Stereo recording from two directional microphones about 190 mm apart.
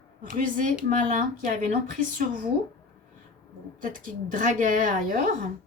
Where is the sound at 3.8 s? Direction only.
45° right (ahead or behind).